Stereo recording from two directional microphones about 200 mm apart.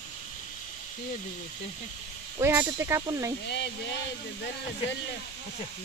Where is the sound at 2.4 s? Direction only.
10° right (ahead or behind).